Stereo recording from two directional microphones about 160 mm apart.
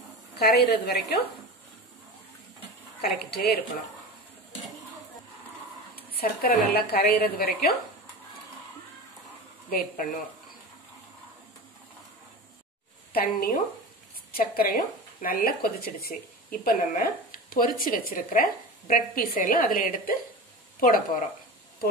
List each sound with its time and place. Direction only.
0.4 s a woman's voice: 85° left
3.0 s a woman's voice: 80° left
5.9 s a woman's voice: 70° left (ahead or behind)
9.7 s speech: 65° left (ahead or behind)
13.1 s speech: 65° left (ahead or behind)